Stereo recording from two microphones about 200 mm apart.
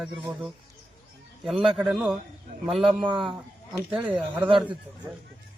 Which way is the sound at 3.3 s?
Centre (ahead or behind).